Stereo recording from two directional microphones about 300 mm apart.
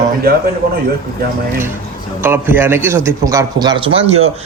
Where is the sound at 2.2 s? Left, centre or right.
Centre.